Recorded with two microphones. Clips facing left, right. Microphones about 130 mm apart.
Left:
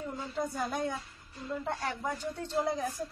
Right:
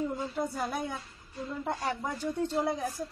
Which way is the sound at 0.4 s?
15° right (ahead or behind).